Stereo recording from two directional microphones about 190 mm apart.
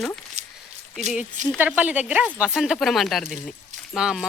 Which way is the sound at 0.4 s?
35° right (ahead or behind).